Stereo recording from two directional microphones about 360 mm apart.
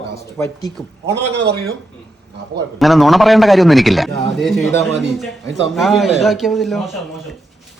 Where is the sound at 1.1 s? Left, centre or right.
Right.